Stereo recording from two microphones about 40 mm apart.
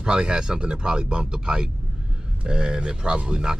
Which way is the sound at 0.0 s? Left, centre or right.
Centre.